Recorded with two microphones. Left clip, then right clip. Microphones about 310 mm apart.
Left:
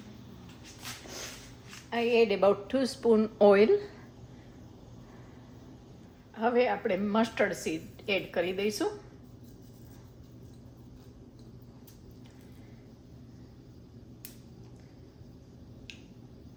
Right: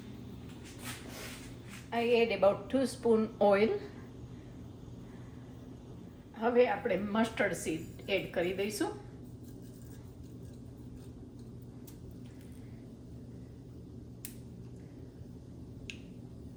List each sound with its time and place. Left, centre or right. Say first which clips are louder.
1.9 s a woman's voice: left 3 dB; left
6.3 s a woman's voice: left 1 dB; left